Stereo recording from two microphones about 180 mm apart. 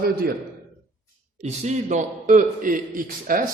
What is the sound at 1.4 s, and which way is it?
A man's voice, 40° right (ahead or behind).